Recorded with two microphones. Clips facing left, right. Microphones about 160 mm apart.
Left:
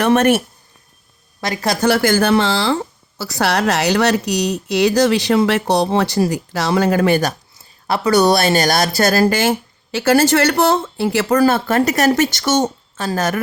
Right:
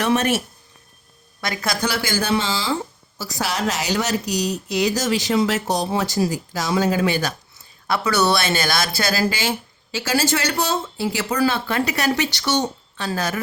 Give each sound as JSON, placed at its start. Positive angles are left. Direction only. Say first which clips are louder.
{"t": 0.0, "sound": "a woman's voice", "louder": "left 6 dB", "side_deg": 60}
{"t": 1.4, "sound": "a woman's voice", "louder": "left 5 dB", "side_deg": 35}
{"t": 1.9, "sound": "a woman's voice", "louder": "left 10 dB", "side_deg": 55}
{"t": 7.9, "sound": "speech", "louder": "left 6 dB", "side_deg": 35}